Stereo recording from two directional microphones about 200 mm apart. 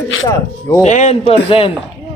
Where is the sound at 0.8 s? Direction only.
35° left (ahead or behind).